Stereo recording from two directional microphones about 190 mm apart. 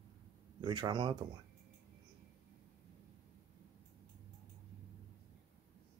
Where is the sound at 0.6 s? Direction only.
20° right (ahead or behind).